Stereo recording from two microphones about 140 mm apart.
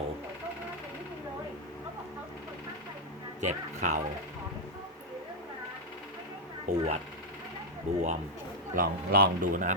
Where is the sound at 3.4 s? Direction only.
60° right (ahead or behind).